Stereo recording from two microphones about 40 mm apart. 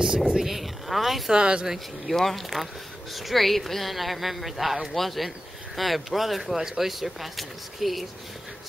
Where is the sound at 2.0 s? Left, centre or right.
Centre.